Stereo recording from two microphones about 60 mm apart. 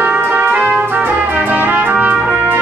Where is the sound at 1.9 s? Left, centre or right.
Right.